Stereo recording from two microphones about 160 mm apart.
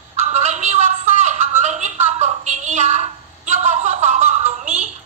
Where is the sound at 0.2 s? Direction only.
45° right (ahead or behind).